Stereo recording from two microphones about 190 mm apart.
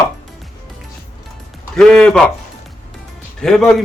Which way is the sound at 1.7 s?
5° left (ahead or behind).